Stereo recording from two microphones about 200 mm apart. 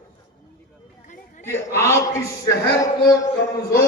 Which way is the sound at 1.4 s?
10° left (ahead or behind).